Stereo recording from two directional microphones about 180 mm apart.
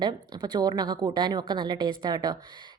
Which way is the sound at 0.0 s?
25° right (ahead or behind).